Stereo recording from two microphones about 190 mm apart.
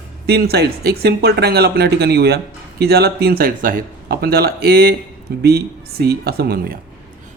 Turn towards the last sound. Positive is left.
turn(degrees=-55)  # may be behind; listen again after turning